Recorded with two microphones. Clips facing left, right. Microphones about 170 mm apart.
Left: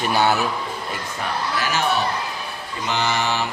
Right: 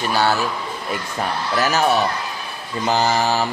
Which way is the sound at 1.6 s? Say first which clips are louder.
Right 7 dB; 40° right (ahead or behind).